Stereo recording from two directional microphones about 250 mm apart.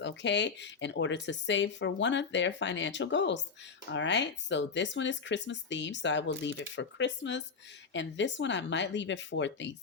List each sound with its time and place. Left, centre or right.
0.0 s speech: left